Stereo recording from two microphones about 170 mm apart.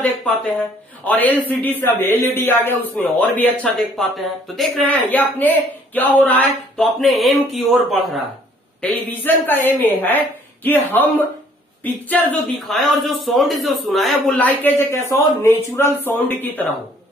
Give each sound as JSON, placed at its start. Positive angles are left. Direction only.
{"t": 0.2, "sound": "a man's voice", "side_deg": 10}
{"t": 8.8, "sound": "a man's voice", "side_deg": 10}